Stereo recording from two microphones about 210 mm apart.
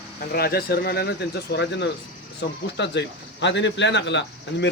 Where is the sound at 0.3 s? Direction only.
45° left (ahead or behind).